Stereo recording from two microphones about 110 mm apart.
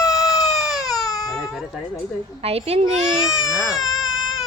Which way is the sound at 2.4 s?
65° right (ahead or behind).